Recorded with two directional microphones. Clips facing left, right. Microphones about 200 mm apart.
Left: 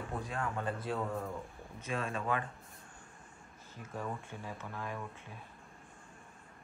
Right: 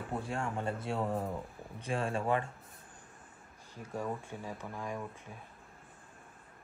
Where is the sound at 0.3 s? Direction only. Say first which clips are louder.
Right 1 dB; 30° right (ahead or behind).